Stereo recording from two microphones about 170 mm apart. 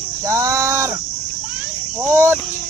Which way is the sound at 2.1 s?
15° right (ahead or behind).